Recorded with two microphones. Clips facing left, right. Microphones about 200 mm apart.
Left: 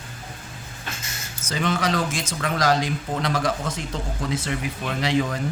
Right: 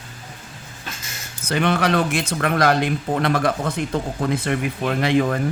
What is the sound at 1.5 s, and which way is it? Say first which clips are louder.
Speech: right 4 dB; 65° right (ahead or behind).